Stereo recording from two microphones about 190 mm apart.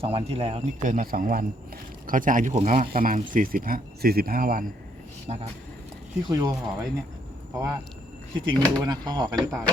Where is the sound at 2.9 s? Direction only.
45° right (ahead or behind).